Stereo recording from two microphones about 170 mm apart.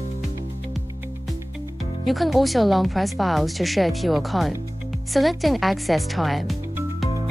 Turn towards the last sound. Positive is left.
turn(degrees=0)  # may be behind; listen again after turning